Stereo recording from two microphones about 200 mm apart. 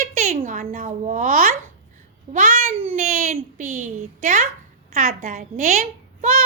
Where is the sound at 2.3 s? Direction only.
40° right (ahead or behind).